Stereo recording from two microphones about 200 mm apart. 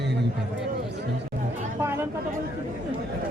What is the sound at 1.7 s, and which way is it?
Speech, 10° right (ahead or behind).